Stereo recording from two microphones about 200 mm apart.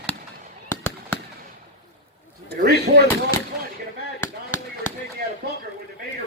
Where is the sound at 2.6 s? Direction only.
55° right (ahead or behind).